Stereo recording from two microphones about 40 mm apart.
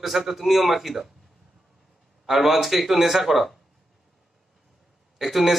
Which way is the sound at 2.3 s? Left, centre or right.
Centre.